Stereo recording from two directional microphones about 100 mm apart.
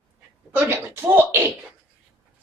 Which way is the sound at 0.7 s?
25° right (ahead or behind).